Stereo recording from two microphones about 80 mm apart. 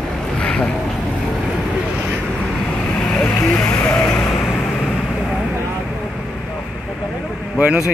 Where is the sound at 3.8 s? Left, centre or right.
Centre.